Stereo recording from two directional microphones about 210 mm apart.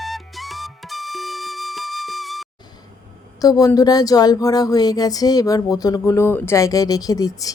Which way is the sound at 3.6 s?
15° left (ahead or behind).